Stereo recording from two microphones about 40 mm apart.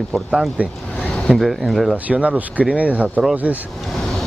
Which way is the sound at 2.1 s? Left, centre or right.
Right.